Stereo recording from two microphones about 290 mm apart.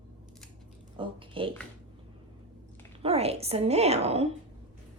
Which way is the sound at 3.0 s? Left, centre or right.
Right.